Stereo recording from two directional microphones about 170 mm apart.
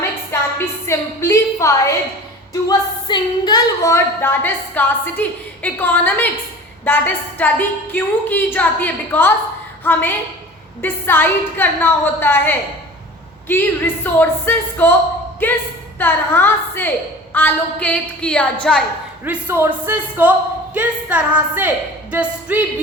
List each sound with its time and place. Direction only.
0.3 s music: 15° left (ahead or behind)
0.9 s a woman's voice: 15° left (ahead or behind)
19.2 s speech: 10° right (ahead or behind)